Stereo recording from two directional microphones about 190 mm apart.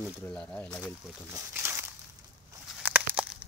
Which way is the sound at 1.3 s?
10° right (ahead or behind).